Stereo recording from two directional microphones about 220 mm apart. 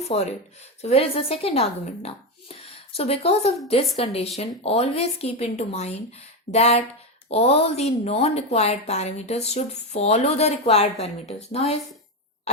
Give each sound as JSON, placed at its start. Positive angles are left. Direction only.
{"t": 0.0, "sound": "a woman's voice", "side_deg": 30}